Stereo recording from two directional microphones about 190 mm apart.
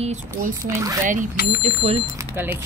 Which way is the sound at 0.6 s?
15° right (ahead or behind).